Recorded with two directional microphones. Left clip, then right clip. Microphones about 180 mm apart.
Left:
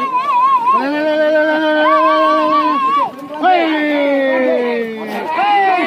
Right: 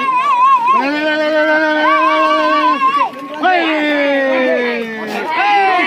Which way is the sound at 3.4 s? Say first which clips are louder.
Even; 5° left (ahead or behind).